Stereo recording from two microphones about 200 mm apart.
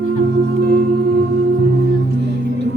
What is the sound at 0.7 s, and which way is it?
Singing bowl, 55° right (ahead or behind).